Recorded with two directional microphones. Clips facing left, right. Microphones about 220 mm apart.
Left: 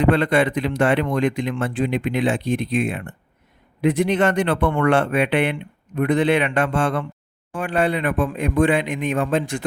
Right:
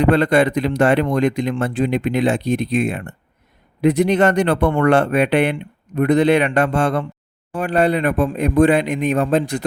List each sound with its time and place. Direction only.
0.0 s speech: 40° right (ahead or behind)